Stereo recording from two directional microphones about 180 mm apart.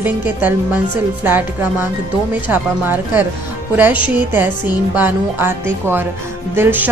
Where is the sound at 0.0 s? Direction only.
10° right (ahead or behind).